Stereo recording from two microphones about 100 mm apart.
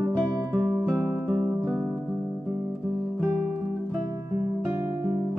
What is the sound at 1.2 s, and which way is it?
Music, 30° right (ahead or behind).